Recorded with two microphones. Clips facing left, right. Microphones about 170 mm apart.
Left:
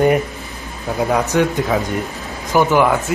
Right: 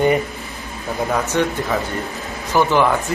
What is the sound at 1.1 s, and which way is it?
Speech, 10° left (ahead or behind).